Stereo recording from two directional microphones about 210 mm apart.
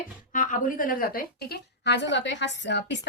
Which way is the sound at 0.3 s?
40° left (ahead or behind).